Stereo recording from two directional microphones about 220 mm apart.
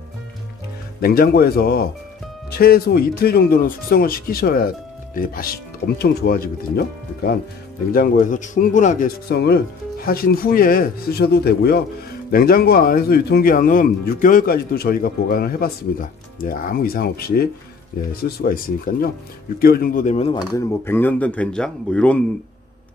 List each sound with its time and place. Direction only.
1.0 s a man's voice: 45° left (ahead or behind); by 20.4 s 25° left (ahead or behind)
20.5 s speech: 10° left (ahead or behind)